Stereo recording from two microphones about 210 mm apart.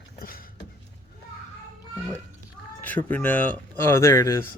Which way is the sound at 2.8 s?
10° left (ahead or behind).